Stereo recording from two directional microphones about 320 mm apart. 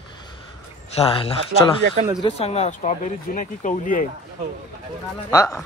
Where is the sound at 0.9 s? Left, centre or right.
Centre.